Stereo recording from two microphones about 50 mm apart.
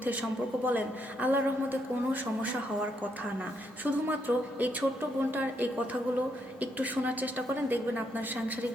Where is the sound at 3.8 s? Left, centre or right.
Right.